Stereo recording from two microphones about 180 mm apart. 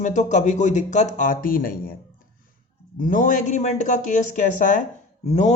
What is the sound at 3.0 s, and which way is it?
Speech, 45° left (ahead or behind).